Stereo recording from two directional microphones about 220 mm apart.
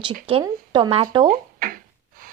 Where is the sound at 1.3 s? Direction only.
40° right (ahead or behind).